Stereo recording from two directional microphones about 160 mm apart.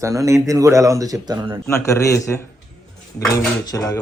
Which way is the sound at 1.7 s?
20° left (ahead or behind).